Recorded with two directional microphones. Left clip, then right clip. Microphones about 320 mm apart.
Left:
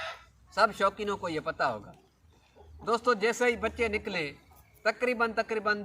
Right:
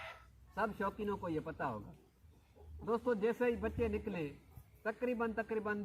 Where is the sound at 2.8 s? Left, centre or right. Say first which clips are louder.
Left 8 dB; centre.